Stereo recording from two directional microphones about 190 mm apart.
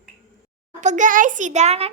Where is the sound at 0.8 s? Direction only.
40° right (ahead or behind).